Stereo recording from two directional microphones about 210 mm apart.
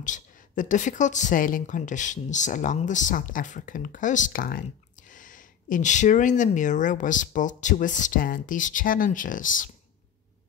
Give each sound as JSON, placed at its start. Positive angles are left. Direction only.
{"t": 0.0, "sound": "a woman's voice", "side_deg": 35}